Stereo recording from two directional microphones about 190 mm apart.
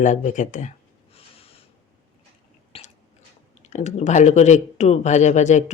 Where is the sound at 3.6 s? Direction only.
35° left (ahead or behind).